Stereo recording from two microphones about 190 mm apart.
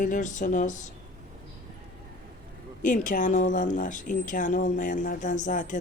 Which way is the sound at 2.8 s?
45° left (ahead or behind).